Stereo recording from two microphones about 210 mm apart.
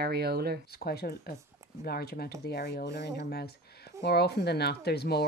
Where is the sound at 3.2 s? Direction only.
50° left (ahead or behind).